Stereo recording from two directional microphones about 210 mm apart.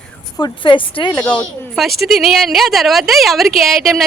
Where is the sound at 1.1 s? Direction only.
5° left (ahead or behind).